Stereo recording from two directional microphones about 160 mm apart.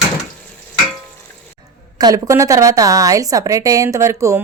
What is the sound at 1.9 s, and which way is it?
A woman's voice, 20° right (ahead or behind).